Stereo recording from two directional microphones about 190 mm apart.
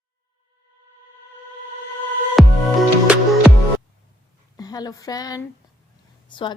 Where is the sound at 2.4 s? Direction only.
Centre (ahead or behind).